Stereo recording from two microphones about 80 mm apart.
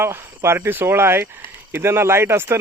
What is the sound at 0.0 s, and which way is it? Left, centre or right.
Speech, right.